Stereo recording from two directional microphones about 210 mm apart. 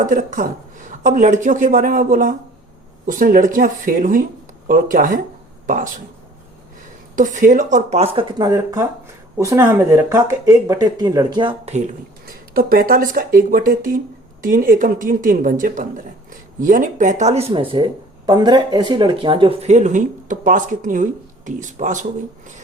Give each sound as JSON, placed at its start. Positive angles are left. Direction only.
{"t": 0.0, "sound": "speech", "side_deg": -40}
{"t": 7.2, "sound": "speech", "side_deg": -35}